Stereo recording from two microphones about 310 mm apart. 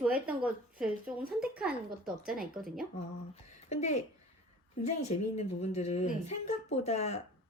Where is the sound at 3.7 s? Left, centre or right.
Left.